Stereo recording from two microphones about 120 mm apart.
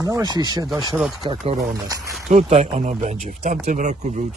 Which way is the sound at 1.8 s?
30° right (ahead or behind).